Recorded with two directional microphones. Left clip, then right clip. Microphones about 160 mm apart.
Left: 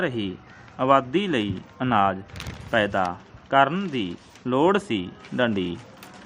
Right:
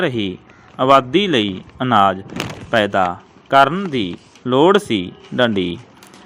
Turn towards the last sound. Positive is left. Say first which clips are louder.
# right 7 dB
turn(degrees=-30)  # may be behind; listen again after turning